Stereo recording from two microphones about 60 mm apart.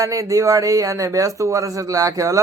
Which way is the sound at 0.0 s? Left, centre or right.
Right.